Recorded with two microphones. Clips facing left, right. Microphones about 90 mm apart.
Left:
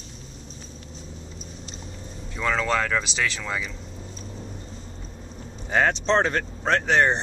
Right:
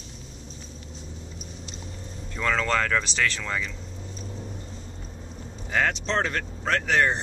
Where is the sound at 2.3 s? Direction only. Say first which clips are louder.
Left 1 dB; 5° left (ahead or behind).